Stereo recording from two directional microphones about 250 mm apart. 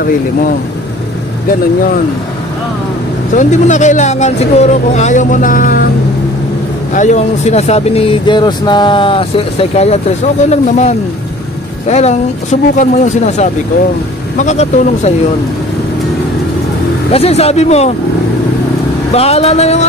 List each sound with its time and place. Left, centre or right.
3.3 s speech: left
6.9 s speech: left
17.1 s speech: left
19.1 s speech: left